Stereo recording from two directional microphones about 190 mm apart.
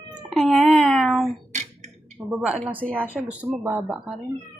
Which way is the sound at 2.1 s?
5° right (ahead or behind).